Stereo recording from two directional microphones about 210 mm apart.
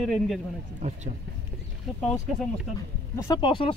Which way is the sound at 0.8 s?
35° right (ahead or behind).